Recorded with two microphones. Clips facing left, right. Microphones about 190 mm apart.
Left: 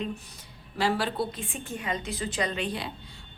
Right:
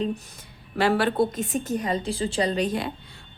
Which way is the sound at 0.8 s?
60° right (ahead or behind).